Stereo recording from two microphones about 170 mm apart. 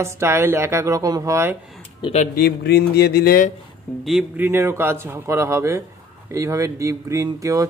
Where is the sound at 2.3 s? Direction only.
65° left (ahead or behind).